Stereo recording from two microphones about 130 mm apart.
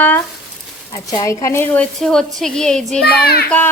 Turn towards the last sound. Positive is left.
turn(degrees=10)  # may be behind; listen again after turning